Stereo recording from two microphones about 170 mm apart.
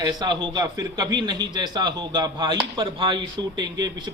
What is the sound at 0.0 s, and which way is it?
A man's voice, 25° right (ahead or behind).